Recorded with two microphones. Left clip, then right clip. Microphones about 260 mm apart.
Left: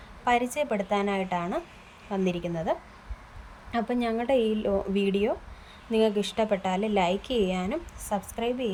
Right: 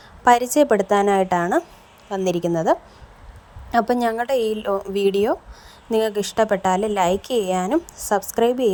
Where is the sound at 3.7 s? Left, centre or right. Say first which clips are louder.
Right 9 dB; centre.